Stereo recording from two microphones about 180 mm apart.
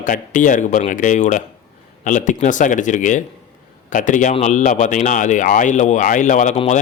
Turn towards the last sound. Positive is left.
turn(degrees=40)  # may be behind; listen again after turning